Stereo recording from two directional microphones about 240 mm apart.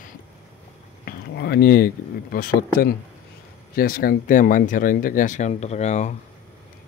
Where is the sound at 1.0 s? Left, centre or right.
Left.